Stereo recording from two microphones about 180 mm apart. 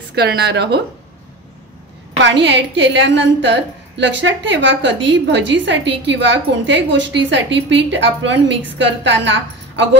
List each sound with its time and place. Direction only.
0.1 s speech: 65° right (ahead or behind)
2.2 s a woman's voice: 75° right (ahead or behind); by 9.8 s 90° right